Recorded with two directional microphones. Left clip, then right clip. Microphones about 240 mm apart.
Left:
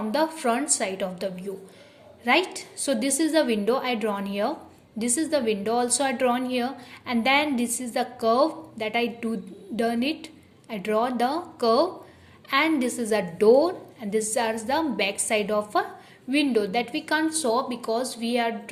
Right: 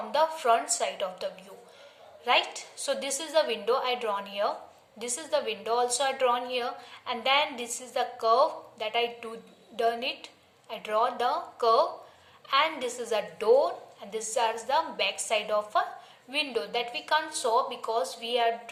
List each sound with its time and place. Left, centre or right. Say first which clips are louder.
0.1 s a woman's voice: right 1 dB; left